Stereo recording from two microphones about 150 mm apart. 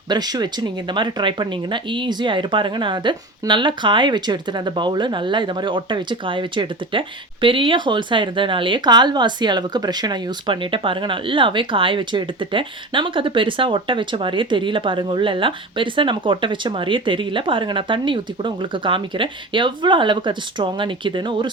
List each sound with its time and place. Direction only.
0.1 s speech: 25° right (ahead or behind)